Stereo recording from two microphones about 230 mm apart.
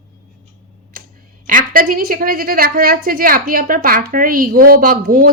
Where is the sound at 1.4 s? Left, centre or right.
Right.